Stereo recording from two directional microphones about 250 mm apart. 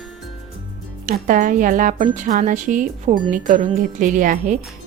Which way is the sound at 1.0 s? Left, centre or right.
Right.